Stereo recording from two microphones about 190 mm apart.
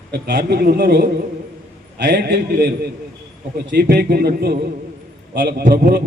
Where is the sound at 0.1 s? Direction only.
60° right (ahead or behind).